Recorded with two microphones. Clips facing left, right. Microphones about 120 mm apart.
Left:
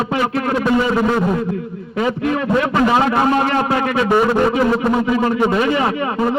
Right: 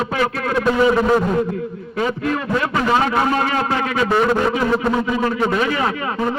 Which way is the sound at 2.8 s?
5° left (ahead or behind).